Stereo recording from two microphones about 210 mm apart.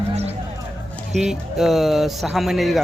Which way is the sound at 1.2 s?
Centre (ahead or behind).